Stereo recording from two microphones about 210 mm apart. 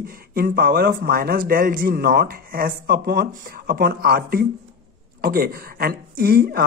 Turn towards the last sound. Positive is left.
turn(degrees=-45)  # may be behind; listen again after turning